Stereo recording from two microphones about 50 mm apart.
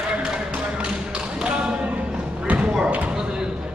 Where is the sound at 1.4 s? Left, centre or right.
Right.